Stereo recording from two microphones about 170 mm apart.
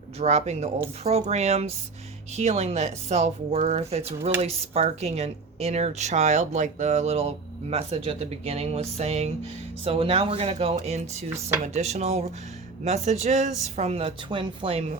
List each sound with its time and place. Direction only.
0.2 s a woman's voice: 40° right (ahead or behind)